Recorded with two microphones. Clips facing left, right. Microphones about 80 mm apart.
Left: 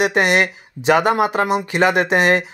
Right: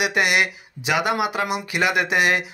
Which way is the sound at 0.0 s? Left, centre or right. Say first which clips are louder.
Left 4 dB; left.